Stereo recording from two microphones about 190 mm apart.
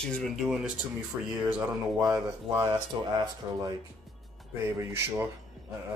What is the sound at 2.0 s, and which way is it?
Speech, 15° right (ahead or behind).